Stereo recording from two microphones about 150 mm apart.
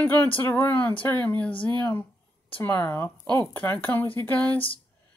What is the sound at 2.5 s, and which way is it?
Speech, 15° left (ahead or behind).